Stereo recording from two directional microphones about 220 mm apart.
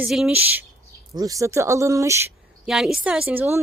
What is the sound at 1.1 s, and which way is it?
Speech, 15° right (ahead or behind).